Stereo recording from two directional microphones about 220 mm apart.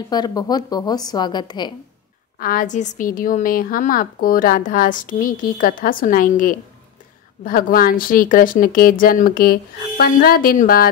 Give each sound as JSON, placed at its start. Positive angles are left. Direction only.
{"t": 0.1, "sound": "a woman's voice", "side_deg": 15}
{"t": 2.3, "sound": "a woman's voice", "side_deg": 40}